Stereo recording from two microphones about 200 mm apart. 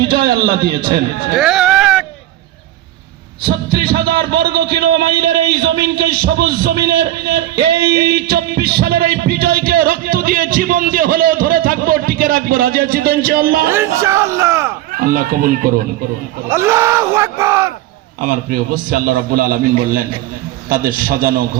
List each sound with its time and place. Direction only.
0.0 s a man's voice: 50° right (ahead or behind)
1.4 s a sound: centre (ahead or behind)
3.4 s a man's voice: 50° right (ahead or behind)
13.7 s speech: 15° right (ahead or behind)
14.9 s a man's voice: 45° right (ahead or behind)
16.5 s speech: 15° right (ahead or behind)
18.2 s a man's voice: 45° right (ahead or behind)